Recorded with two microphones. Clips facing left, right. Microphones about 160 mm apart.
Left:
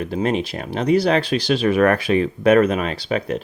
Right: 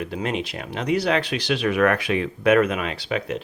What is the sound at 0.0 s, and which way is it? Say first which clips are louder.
Speech: left 5 dB; 35° left (ahead or behind).